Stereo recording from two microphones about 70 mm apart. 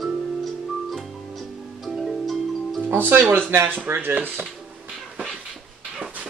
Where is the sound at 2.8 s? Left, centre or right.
Right.